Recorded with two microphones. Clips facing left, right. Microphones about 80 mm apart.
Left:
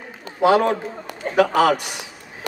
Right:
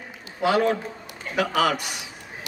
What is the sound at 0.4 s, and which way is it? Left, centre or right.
A man's voice, left.